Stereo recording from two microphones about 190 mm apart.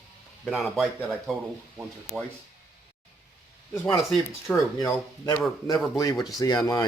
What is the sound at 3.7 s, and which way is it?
Speech, 15° left (ahead or behind).